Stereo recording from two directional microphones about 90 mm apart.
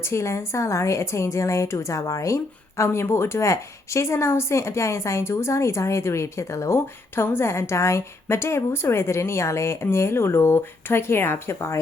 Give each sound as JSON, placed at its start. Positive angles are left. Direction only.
{"t": 0.0, "sound": "a woman's voice", "side_deg": 30}